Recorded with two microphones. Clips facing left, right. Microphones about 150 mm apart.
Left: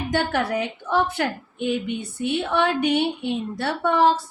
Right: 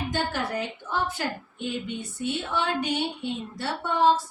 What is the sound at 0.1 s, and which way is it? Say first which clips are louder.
A woman's voice: left 9 dB; 65° left (ahead or behind).